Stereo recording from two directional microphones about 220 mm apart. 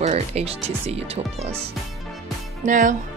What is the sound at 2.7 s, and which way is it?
Speech, 35° right (ahead or behind).